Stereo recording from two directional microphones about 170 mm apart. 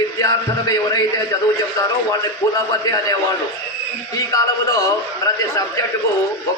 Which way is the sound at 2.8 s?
20° left (ahead or behind).